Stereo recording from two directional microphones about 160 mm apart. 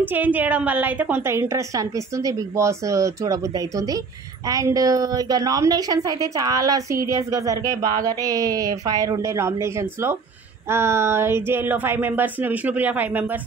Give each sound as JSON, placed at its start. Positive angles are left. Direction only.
{"t": 0.0, "sound": "a woman's voice", "side_deg": -10}